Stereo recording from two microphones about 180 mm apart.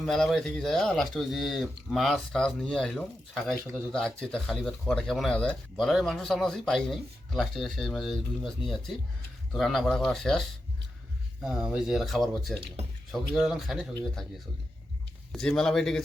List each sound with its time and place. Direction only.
0.0 s speech: centre (ahead or behind)
11.4 s speech: 5° right (ahead or behind)
15.3 s speech: 5° left (ahead or behind)